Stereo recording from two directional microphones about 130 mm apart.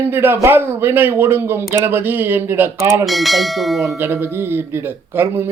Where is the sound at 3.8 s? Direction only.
20° right (ahead or behind).